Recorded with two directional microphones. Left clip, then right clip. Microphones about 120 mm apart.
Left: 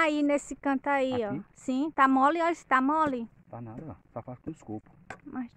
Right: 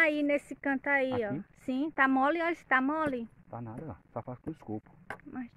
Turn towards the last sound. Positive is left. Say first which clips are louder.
# left 4 dB
turn(degrees=40)  # may be behind; listen again after turning